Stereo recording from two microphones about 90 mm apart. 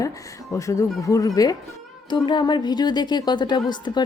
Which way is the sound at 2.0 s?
55° left (ahead or behind).